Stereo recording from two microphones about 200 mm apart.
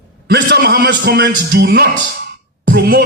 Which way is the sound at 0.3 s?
55° right (ahead or behind).